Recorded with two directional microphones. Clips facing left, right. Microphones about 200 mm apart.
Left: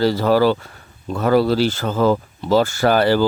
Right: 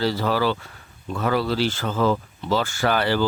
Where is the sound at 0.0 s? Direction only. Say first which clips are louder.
Left 7 dB; 45° left (ahead or behind).